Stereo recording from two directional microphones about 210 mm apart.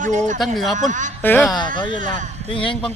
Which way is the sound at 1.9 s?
40° right (ahead or behind).